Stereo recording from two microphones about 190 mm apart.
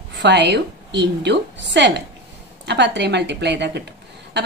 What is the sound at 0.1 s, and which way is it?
A woman's voice, 65° right (ahead or behind).